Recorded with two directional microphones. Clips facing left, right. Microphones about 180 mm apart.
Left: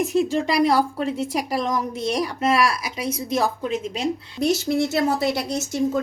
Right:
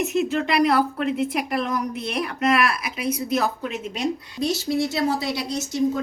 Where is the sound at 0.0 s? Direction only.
30° left (ahead or behind).